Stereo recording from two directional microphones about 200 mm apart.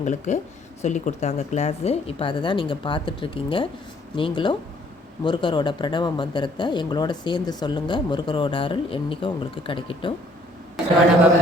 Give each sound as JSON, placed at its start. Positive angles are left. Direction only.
{"t": 0.0, "sound": "speech", "side_deg": 35}